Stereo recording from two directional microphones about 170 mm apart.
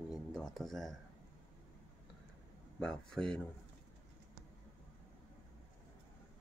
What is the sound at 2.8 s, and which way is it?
Speech, 5° left (ahead or behind).